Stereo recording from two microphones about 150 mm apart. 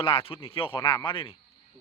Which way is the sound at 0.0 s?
35° left (ahead or behind).